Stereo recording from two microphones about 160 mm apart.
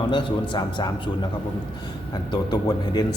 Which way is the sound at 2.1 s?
25° left (ahead or behind).